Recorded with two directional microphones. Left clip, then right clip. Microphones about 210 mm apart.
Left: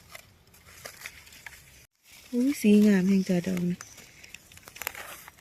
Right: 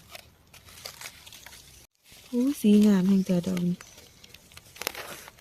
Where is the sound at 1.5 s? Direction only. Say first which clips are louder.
Left 6 dB; 60° right (ahead or behind).